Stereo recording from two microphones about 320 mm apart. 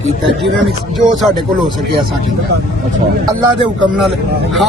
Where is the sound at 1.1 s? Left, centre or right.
Centre.